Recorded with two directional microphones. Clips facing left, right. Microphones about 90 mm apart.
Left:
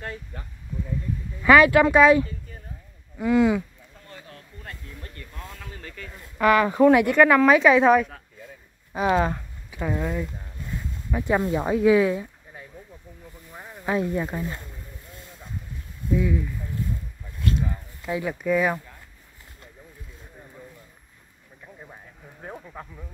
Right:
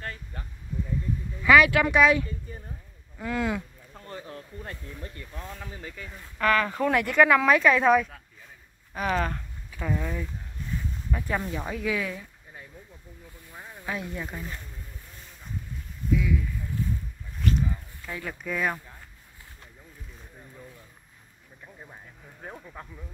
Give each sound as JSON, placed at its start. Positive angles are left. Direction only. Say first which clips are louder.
{"t": 0.0, "sound": "a sound", "louder": "left 3 dB", "side_deg": 15}
{"t": 1.4, "sound": "speech", "louder": "left 4 dB", "side_deg": 35}
{"t": 3.2, "sound": "speech", "louder": "left 9 dB", "side_deg": 10}
{"t": 4.0, "sound": "a sound", "louder": "right 5 dB", "side_deg": -30}
{"t": 6.3, "sound": "speech", "louder": "left 5 dB", "side_deg": 15}
{"t": 8.9, "sound": "speech", "louder": "left 6 dB", "side_deg": 20}
{"t": 13.5, "sound": "snake", "louder": "left 2 dB", "side_deg": 5}
{"t": 13.8, "sound": "speech", "louder": "left 9 dB", "side_deg": 35}
{"t": 16.1, "sound": "speech", "louder": "left 3 dB", "side_deg": 30}
{"t": 17.6, "sound": "a sound", "louder": "left 5 dB", "side_deg": 10}
{"t": 18.4, "sound": "speech", "louder": "left 6 dB", "side_deg": 5}
{"t": 21.9, "sound": "a sound", "louder": "left 2 dB", "side_deg": 5}